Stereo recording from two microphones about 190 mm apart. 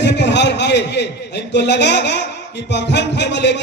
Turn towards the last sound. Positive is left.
turn(degrees=65)  # may be behind; listen again after turning